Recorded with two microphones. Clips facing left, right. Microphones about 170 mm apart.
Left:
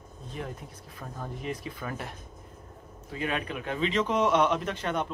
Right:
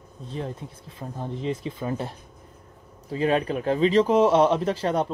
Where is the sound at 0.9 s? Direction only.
25° right (ahead or behind).